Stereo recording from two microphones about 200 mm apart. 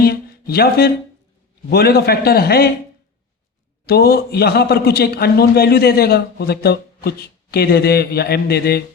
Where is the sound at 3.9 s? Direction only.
50° left (ahead or behind).